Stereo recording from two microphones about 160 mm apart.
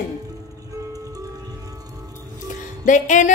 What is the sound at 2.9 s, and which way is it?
Speech, 50° left (ahead or behind).